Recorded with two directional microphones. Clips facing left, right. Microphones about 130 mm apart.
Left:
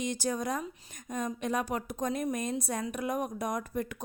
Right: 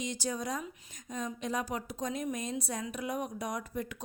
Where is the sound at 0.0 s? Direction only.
50° left (ahead or behind).